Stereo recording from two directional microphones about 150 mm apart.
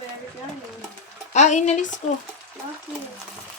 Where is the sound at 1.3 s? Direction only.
50° left (ahead or behind).